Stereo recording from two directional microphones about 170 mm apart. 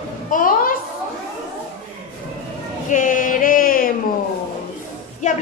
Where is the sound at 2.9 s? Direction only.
50° left (ahead or behind).